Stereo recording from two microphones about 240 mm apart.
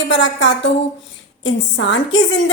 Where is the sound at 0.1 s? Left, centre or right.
Left.